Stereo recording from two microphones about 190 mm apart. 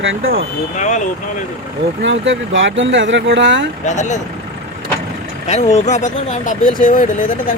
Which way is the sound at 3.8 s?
40° left (ahead or behind).